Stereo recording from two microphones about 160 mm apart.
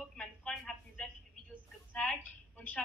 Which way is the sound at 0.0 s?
5° left (ahead or behind).